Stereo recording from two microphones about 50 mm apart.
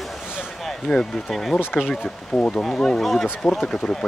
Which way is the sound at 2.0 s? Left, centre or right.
Centre.